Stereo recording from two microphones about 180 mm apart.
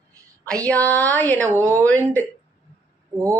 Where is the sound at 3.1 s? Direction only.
15° right (ahead or behind).